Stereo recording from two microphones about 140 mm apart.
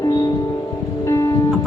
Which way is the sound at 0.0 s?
25° left (ahead or behind).